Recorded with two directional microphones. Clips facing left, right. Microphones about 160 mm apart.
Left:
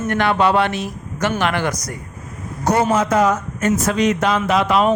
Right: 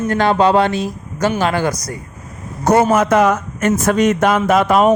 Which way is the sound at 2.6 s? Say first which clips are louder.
Right 4 dB; 50° right (ahead or behind).